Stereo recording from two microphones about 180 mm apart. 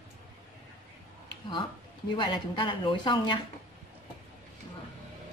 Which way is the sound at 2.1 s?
25° left (ahead or behind).